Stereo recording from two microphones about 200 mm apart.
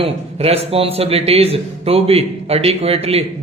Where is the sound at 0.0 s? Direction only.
30° right (ahead or behind).